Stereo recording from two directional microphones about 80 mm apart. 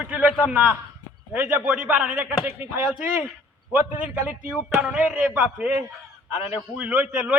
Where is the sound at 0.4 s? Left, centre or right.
Centre.